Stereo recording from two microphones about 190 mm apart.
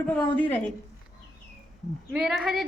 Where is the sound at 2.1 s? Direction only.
Centre (ahead or behind).